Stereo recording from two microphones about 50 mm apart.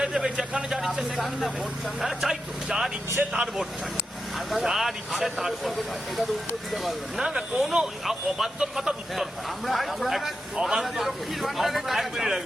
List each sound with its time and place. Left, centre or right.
0.0 s a sound: centre
0.7 s a man's voice: centre
4.4 s a man's voice: centre
7.2 s speech: centre
9.6 s a man's voice: centre